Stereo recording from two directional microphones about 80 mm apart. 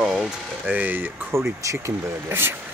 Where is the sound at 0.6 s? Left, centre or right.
Right.